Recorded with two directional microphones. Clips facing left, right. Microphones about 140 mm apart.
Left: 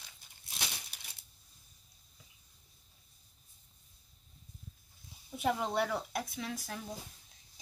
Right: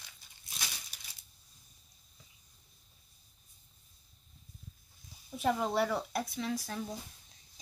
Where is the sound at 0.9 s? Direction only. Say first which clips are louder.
Left 1 dB; 55° left (ahead or behind).